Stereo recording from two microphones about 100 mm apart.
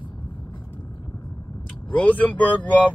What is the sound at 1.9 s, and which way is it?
Speech, 15° left (ahead or behind).